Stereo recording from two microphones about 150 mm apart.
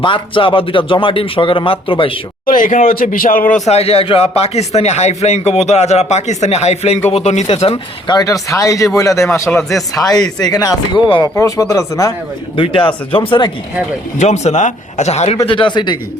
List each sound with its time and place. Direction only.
0.0 s speech: 35° left (ahead or behind)
2.5 s speech: 65° left (ahead or behind)
3.7 s speech: 45° left (ahead or behind)
8.0 s speech: 25° left (ahead or behind)
9.5 s speech: centre (ahead or behind)
9.9 s speech: 25° left (ahead or behind)
12.5 s speech: 35° left (ahead or behind)
14.2 s speech: 50° left (ahead or behind)
15.4 s speech: 35° left (ahead or behind)